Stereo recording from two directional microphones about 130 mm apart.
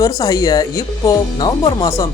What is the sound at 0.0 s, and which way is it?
Speech, 30° left (ahead or behind).